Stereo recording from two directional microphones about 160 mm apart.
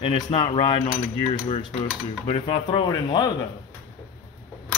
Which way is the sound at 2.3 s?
30° left (ahead or behind).